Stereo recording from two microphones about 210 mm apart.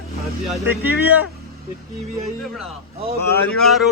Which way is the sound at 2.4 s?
Centre (ahead or behind).